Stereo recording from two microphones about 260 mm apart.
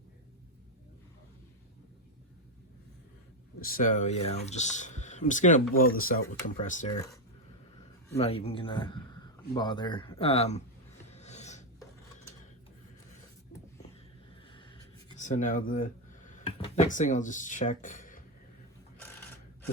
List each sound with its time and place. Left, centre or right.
3.6 s a man's voice: left
6.9 s speech: centre
8.2 s a man's voice: left
11.1 s filing: left
15.2 s a sound: left
16.6 s a man's voice: left